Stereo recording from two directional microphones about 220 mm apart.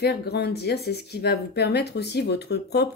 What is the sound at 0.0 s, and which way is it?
Speech, 45° left (ahead or behind).